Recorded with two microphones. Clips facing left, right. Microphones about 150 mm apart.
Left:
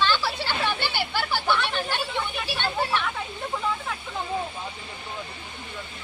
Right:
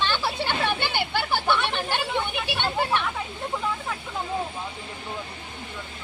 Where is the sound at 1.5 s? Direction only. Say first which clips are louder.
Even; 20° right (ahead or behind).